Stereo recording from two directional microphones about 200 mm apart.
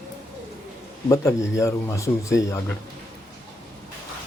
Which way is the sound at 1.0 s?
15° left (ahead or behind).